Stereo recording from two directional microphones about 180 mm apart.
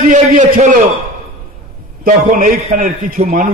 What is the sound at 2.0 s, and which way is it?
A man's voice, 50° right (ahead or behind).